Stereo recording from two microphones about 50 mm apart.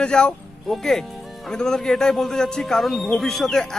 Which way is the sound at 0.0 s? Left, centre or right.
Centre.